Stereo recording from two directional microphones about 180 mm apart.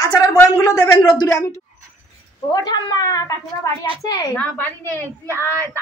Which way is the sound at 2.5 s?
20° left (ahead or behind).